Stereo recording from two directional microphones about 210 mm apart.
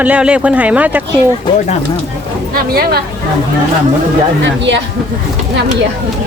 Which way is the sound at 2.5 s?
45° right (ahead or behind).